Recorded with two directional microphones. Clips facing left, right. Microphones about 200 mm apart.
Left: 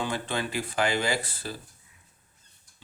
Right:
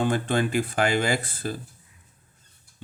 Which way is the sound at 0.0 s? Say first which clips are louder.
Right 7 dB; 50° right (ahead or behind).